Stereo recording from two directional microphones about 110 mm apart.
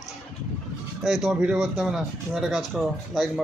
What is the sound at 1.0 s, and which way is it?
Speech, 5° right (ahead or behind).